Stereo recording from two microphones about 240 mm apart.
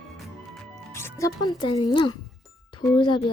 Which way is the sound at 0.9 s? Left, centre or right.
Centre.